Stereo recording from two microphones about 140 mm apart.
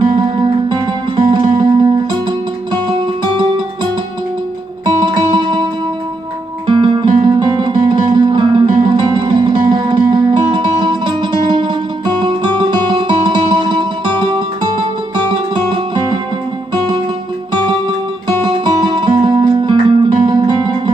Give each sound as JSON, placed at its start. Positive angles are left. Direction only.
{"t": 0.0, "sound": "music", "side_deg": -35}
{"t": 4.8, "sound": "music", "side_deg": -30}
{"t": 6.7, "sound": "music", "side_deg": -35}
{"t": 18.4, "sound": "music", "side_deg": -35}